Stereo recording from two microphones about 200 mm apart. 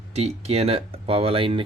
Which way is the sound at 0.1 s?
30° right (ahead or behind).